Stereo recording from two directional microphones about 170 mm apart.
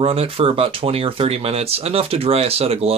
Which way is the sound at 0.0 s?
35° right (ahead or behind).